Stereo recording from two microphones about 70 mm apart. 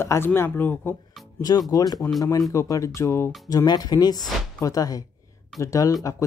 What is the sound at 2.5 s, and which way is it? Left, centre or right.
Speech, left.